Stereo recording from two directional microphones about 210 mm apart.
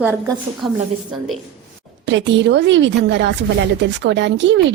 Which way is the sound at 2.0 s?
60° right (ahead or behind).